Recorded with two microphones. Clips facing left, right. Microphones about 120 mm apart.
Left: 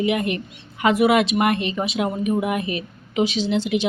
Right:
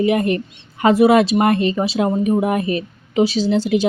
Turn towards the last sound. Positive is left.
turn(degrees=-40)  # may be behind; listen again after turning